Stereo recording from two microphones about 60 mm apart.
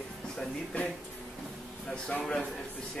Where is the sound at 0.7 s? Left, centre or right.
Left.